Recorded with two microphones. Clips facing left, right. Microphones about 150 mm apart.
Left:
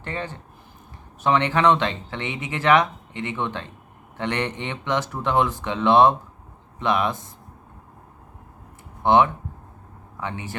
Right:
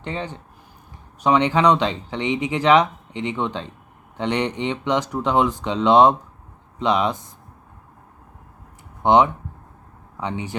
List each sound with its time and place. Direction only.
0.0 s speech: 15° right (ahead or behind)
9.0 s speech: 15° right (ahead or behind)